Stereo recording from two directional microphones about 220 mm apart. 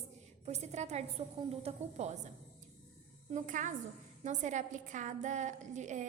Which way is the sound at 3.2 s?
35° right (ahead or behind).